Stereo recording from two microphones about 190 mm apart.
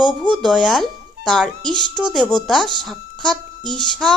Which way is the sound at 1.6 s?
20° right (ahead or behind).